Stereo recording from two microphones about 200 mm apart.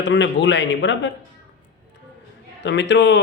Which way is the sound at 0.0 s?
65° left (ahead or behind).